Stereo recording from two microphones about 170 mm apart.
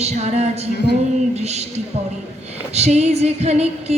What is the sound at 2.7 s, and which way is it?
A woman's voice, 40° right (ahead or behind).